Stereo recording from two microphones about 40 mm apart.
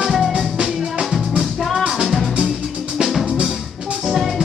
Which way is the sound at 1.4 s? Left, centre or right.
Centre.